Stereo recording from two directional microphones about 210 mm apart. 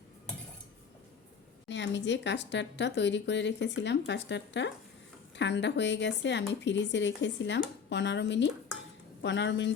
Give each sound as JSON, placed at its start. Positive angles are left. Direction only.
{"t": 1.6, "sound": "speech", "side_deg": 55}